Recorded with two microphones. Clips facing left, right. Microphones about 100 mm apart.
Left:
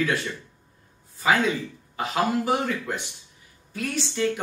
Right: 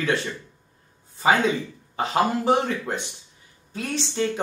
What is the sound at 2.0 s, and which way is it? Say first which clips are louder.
Speech: right 2 dB; 30° right (ahead or behind).